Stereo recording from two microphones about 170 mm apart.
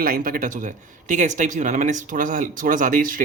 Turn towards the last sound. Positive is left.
turn(degrees=-55)  # may be behind; listen again after turning